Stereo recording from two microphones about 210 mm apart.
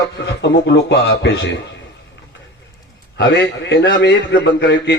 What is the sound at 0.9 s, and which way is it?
Speech, 55° left (ahead or behind).